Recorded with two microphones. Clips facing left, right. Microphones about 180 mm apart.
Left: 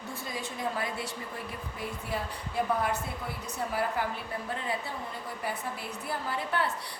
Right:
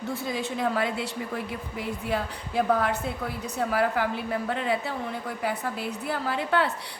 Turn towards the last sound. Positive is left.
turn(degrees=-75)  # may be behind; listen again after turning